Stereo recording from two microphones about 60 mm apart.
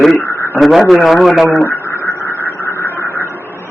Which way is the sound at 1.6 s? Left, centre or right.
Left.